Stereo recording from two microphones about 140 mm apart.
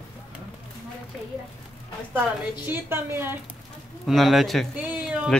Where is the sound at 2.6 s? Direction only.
15° right (ahead or behind).